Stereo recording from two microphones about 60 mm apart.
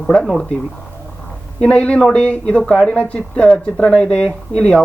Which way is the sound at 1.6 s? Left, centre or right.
Centre.